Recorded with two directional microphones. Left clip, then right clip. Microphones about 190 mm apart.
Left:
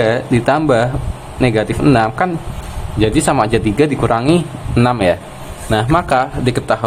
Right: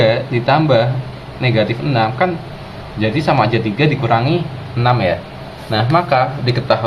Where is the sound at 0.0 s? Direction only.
65° left (ahead or behind).